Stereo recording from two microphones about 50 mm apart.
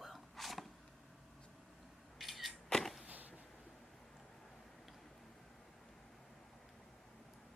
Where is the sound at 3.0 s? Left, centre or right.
Right.